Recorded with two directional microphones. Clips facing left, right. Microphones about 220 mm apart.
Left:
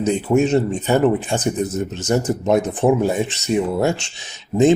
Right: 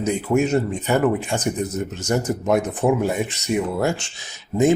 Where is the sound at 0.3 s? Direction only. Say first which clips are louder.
Left 3 dB; 25° left (ahead or behind).